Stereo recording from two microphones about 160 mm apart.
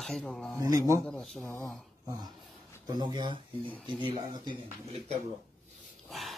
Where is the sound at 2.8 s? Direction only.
25° right (ahead or behind).